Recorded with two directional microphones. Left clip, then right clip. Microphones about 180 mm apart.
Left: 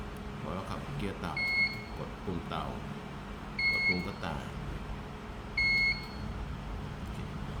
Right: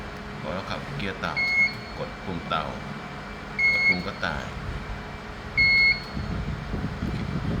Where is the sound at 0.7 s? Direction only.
5° left (ahead or behind).